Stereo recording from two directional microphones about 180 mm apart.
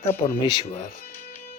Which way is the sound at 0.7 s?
40° left (ahead or behind).